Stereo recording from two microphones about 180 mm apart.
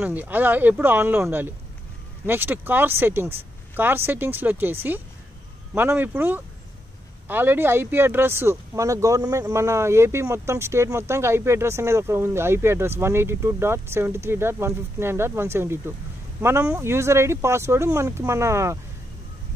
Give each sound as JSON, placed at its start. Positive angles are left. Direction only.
{"t": 0.0, "sound": "speech", "side_deg": -10}